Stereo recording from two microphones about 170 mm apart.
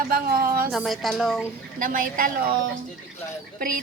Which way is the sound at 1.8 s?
55° right (ahead or behind).